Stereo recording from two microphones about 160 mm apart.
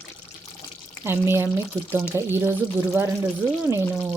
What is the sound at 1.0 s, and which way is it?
Speech, 15° right (ahead or behind).